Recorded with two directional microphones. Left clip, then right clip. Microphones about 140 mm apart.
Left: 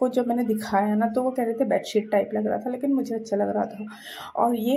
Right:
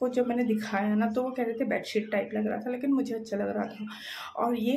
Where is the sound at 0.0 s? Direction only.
35° left (ahead or behind).